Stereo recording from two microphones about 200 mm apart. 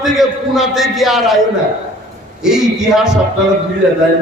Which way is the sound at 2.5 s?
Centre (ahead or behind).